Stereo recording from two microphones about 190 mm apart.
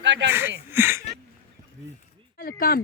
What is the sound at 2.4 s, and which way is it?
Speech, 50° left (ahead or behind).